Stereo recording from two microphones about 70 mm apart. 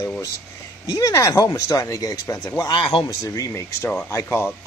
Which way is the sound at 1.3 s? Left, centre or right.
Left.